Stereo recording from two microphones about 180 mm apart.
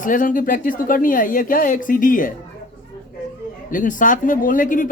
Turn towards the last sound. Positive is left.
turn(degrees=45)  # may be behind; listen again after turning